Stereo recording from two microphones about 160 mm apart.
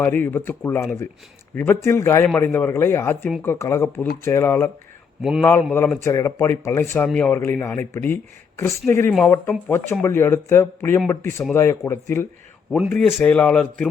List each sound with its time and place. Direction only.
0.0 s speech: 10° left (ahead or behind)
5.2 s speech: centre (ahead or behind)
6.0 s speech: 15° left (ahead or behind)